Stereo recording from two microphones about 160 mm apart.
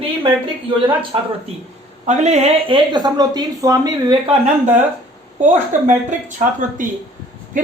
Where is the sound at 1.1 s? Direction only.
30° right (ahead or behind).